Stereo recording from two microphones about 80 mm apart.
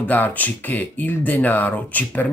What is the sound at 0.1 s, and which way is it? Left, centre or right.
Speech, left.